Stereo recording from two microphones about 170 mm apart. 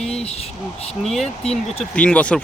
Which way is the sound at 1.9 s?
10° left (ahead or behind).